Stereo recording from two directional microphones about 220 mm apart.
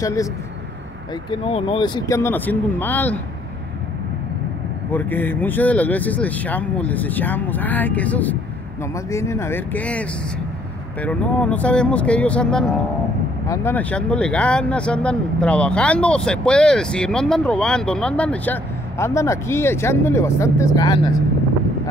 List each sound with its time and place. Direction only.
0.0 s speech: 15° left (ahead or behind)
1.3 s speech: 25° left (ahead or behind); by 3.2 s 10° left (ahead or behind)
4.9 s speech: 10° left (ahead or behind)